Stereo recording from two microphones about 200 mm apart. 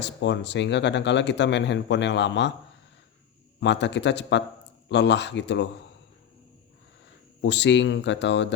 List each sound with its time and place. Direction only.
0.0 s speech: 60° left (ahead or behind)
3.6 s speech: 60° left (ahead or behind)
7.4 s speech: 60° left (ahead or behind)